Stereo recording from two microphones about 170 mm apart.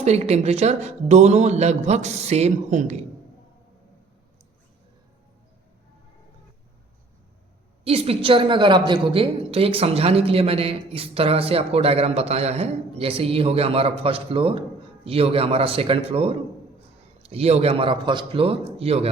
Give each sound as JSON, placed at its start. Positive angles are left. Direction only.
{"t": 0.0, "sound": "a woman's voice", "side_deg": -40}
{"t": 7.9, "sound": "a woman's voice", "side_deg": -35}